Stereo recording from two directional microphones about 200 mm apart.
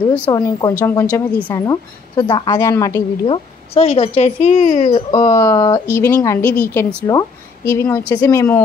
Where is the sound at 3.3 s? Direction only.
30° left (ahead or behind); by 8.6 s 15° left (ahead or behind).